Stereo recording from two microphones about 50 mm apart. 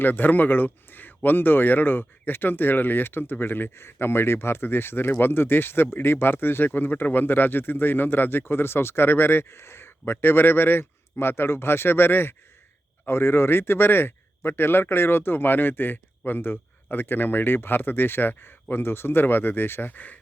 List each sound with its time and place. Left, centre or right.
0.0 s speech: left